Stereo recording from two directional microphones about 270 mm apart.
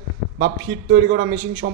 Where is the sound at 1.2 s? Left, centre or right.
Right.